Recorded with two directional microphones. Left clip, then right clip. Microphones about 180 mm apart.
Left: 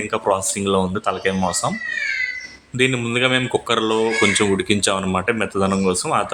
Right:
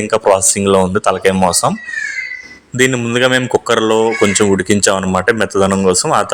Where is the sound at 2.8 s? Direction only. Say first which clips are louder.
Right 6 dB; 35° right (ahead or behind).